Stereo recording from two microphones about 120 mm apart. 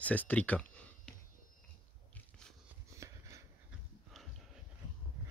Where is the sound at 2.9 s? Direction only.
25° right (ahead or behind).